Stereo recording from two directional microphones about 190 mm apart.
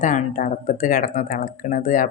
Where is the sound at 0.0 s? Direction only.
40° left (ahead or behind).